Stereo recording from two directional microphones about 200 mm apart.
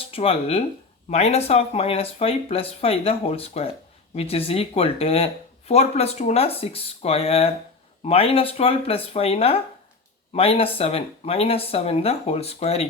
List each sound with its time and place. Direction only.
0.1 s speech: 30° left (ahead or behind)